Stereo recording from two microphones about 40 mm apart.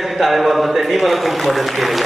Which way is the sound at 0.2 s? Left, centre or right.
Centre.